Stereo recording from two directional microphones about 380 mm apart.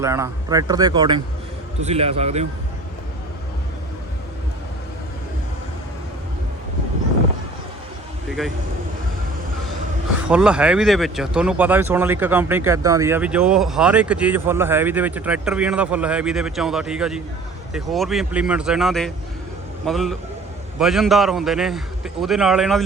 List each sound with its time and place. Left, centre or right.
0.0 s speech: centre
10.2 s speech: centre